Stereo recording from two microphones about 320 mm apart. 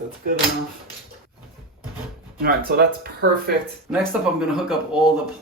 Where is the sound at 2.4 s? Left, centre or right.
Right.